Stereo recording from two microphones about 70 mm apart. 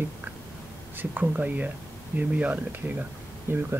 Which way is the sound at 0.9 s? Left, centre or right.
Right.